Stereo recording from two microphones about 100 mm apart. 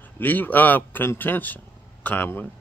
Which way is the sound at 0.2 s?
20° left (ahead or behind).